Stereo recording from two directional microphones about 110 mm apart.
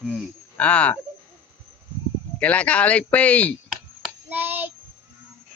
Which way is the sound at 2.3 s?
10° left (ahead or behind).